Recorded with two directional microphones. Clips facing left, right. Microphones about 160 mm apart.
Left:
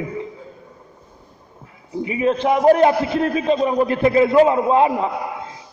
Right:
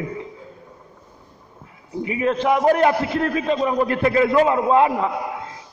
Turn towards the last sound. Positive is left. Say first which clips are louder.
# left 1 dB
turn(degrees=25)  # may be behind; listen again after turning